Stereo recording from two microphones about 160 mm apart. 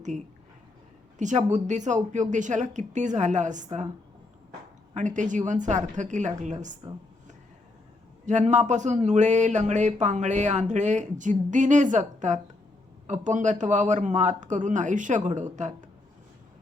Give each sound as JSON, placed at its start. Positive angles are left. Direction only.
{"t": 1.2, "sound": "speech", "side_deg": -45}
{"t": 4.9, "sound": "speech", "side_deg": -50}
{"t": 8.3, "sound": "speech", "side_deg": -50}